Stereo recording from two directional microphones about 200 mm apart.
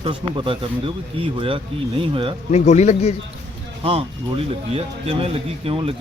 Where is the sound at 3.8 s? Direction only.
30° right (ahead or behind).